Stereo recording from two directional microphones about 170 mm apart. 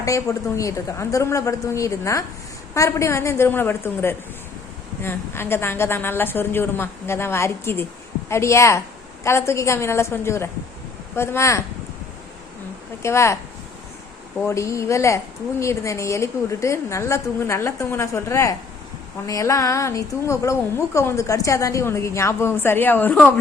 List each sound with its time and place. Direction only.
0.0 s a woman's voice: 20° left (ahead or behind)
13.0 s a woman's voice: 15° left (ahead or behind)